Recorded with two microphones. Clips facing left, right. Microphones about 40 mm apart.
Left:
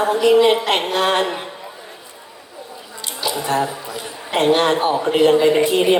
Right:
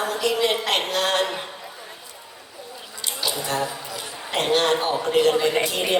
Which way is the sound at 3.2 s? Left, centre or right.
Left.